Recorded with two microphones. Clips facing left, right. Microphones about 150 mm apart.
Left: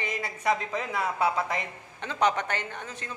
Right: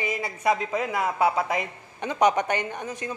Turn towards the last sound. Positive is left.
turn(degrees=-15)  # may be behind; listen again after turning